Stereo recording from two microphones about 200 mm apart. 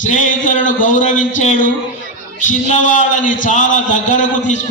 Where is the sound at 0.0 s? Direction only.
40° left (ahead or behind).